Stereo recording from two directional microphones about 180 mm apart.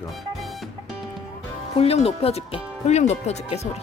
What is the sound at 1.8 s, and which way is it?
Speech, 35° left (ahead or behind).